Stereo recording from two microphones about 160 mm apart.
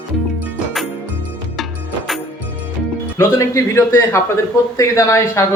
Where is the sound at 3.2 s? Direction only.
15° left (ahead or behind).